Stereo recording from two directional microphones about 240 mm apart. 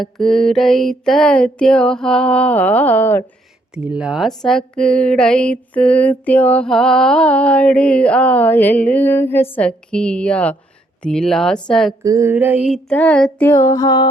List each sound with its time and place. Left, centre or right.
0.0 s speech: centre
3.8 s speech: centre
12.0 s speech: centre